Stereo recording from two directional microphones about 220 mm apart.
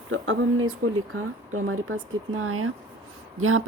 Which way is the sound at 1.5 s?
70° right (ahead or behind).